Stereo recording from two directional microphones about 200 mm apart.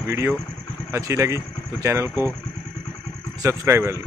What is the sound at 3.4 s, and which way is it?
Speech, 15° right (ahead or behind).